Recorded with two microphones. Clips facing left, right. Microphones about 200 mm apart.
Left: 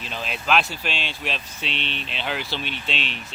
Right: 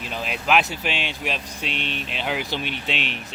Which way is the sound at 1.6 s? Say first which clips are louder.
Right 1 dB; 50° right (ahead or behind).